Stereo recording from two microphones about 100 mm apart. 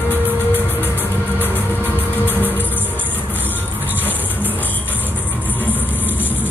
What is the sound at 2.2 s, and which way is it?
Music, 20° left (ahead or behind).